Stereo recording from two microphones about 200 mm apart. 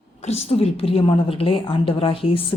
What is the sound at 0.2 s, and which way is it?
A woman's voice, 30° left (ahead or behind).